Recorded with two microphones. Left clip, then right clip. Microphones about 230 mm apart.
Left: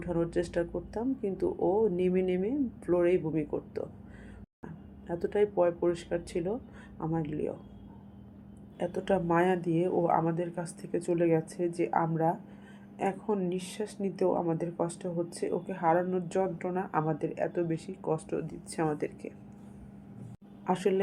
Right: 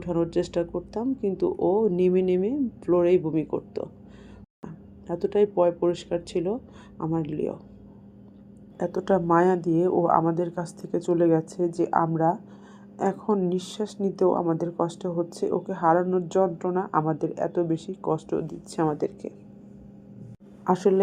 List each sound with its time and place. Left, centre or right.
0.0 s speech: centre
9.0 s speech: centre
20.7 s speech: right